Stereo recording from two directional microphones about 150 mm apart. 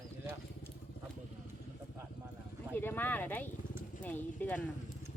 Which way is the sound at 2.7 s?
15° left (ahead or behind).